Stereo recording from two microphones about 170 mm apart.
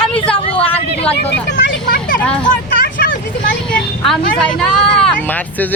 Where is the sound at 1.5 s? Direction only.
90° left.